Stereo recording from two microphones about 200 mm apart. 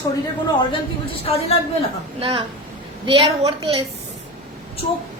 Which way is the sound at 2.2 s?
25° right (ahead or behind).